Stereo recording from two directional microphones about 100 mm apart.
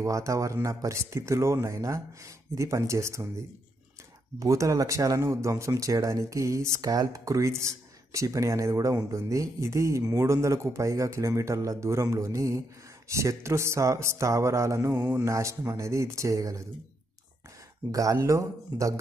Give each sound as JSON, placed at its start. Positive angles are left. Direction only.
{"t": 0.0, "sound": "speech", "side_deg": -30}
{"t": 17.9, "sound": "speech", "side_deg": -35}